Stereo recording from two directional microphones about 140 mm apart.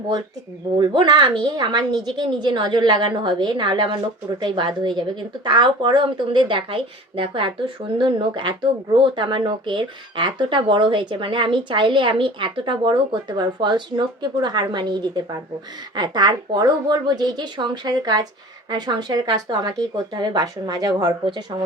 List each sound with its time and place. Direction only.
0.8 s speech: 35° right (ahead or behind)